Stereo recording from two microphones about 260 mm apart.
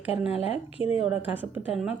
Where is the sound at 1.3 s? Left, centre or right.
Centre.